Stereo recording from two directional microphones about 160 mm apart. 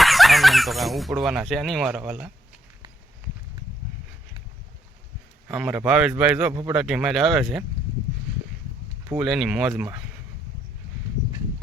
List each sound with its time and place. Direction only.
0.0 s speech: centre (ahead or behind)
5.5 s speech: 5° right (ahead or behind)
6.8 s speech: centre (ahead or behind)
9.1 s speech: centre (ahead or behind)